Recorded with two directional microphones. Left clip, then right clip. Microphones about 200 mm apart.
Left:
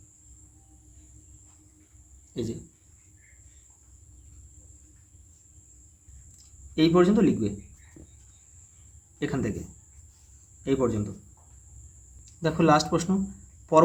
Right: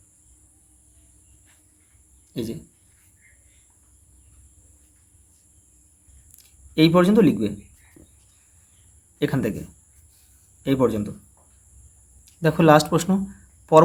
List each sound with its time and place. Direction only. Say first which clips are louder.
2.3 s a sound: right 3 dB; 25° right (ahead or behind)
6.3 s speech: right 6 dB; 35° right (ahead or behind)
9.1 s a man's voice: right 6 dB; 35° right (ahead or behind)
10.6 s a man's voice: right 5 dB; 35° right (ahead or behind)
12.2 s speech: right 6 dB; 35° right (ahead or behind)